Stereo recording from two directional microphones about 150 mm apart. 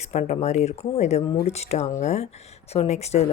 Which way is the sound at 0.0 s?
45° left (ahead or behind).